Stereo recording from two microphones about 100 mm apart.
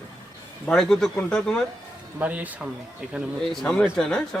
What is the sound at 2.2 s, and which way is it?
Speech, 15° right (ahead or behind).